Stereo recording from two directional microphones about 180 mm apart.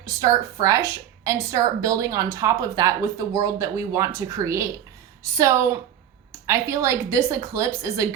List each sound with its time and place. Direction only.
0.0 s speech: 20° right (ahead or behind)